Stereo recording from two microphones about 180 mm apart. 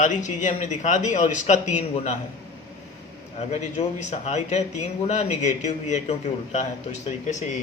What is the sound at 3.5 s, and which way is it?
Speech, 40° left (ahead or behind).